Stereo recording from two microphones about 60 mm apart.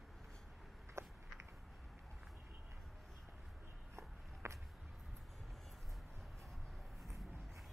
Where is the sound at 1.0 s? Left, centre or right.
Right.